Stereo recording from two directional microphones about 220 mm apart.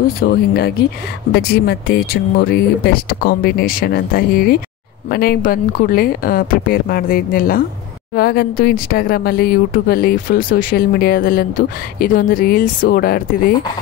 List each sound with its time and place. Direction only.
0.2 s speech: 45° left (ahead or behind)